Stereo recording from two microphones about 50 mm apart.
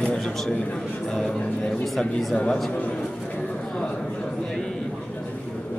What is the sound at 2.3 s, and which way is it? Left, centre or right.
Speech, left.